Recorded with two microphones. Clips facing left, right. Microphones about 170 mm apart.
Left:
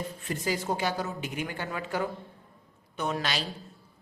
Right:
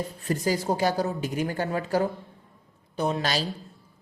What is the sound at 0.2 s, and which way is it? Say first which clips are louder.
A woman's voice: right 6 dB; 40° right (ahead or behind).